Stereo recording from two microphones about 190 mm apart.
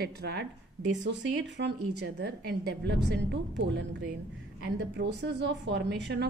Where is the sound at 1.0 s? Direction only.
70° right (ahead or behind).